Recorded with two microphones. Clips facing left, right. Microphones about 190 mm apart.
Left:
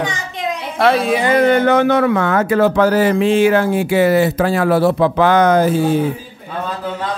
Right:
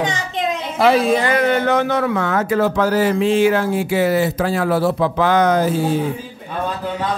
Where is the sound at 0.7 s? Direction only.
Centre (ahead or behind).